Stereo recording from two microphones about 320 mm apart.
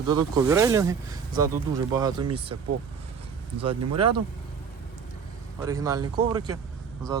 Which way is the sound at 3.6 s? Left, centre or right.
Centre.